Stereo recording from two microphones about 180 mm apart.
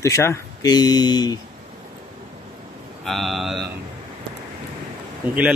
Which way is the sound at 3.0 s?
Centre (ahead or behind).